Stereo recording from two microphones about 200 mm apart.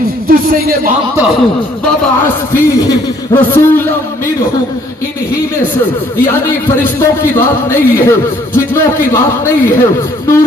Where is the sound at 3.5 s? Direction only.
10° left (ahead or behind).